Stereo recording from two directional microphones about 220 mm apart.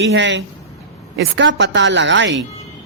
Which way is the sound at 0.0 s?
55° right (ahead or behind).